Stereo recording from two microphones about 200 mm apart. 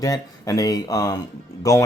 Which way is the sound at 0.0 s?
15° left (ahead or behind).